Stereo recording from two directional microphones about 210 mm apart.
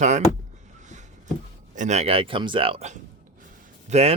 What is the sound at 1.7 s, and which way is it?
Speech, 35° right (ahead or behind).